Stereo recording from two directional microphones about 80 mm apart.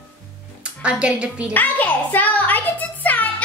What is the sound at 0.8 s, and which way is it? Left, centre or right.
Speech, centre.